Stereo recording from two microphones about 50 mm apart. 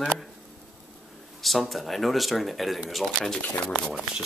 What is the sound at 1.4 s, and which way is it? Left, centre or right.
Speech, centre.